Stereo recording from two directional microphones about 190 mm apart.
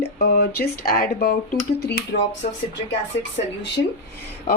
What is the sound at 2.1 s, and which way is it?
Speech, 60° left (ahead or behind).